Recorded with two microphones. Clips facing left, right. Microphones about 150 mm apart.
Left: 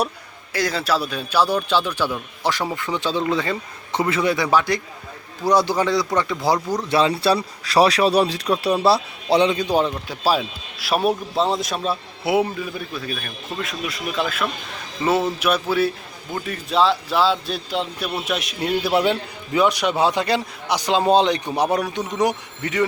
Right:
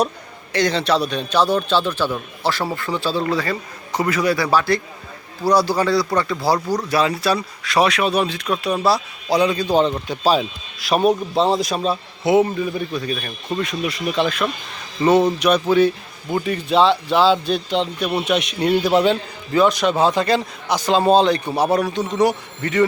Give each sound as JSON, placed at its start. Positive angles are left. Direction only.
{"t": 0.5, "sound": "a man's voice", "side_deg": 5}
{"t": 9.7, "sound": "a man's voice", "side_deg": 5}